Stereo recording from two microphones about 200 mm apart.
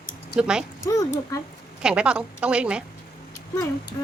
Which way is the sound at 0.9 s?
15° left (ahead or behind).